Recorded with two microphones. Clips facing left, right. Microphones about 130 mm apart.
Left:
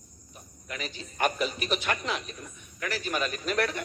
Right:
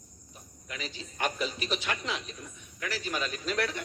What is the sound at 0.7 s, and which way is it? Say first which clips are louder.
Speech: left 2 dB; 55° left (ahead or behind).